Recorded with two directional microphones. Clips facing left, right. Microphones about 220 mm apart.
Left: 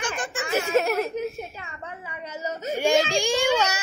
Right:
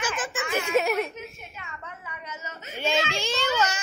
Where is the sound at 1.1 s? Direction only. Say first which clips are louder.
Left 11 dB; 35° left (ahead or behind).